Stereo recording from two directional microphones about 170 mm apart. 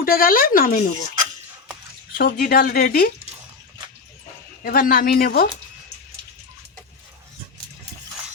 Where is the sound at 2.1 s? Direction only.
60° left (ahead or behind).